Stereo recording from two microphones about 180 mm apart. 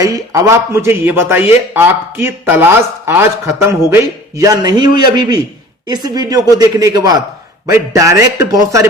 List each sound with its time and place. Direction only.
0.0 s a man's voice: 20° right (ahead or behind)